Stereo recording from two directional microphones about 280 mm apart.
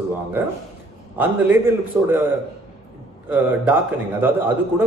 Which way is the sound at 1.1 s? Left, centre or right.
Centre.